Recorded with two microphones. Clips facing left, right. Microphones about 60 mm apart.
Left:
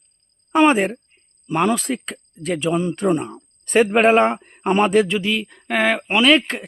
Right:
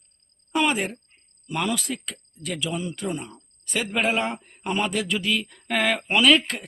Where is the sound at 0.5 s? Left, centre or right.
Left.